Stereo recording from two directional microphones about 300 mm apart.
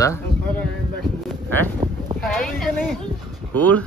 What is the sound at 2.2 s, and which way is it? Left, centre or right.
Speech, centre.